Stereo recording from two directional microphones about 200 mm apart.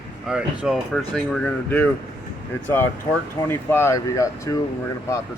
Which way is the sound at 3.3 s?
10° left (ahead or behind).